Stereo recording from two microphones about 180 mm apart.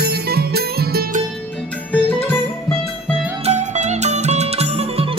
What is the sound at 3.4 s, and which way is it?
Music, 40° right (ahead or behind).